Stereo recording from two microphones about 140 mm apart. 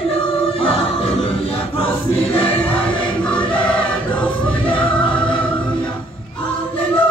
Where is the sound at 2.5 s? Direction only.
10° left (ahead or behind).